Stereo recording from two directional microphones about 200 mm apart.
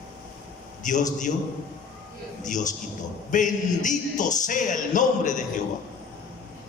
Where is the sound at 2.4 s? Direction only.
40° left (ahead or behind).